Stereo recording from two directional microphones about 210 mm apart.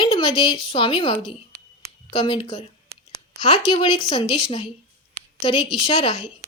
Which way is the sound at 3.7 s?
30° left (ahead or behind).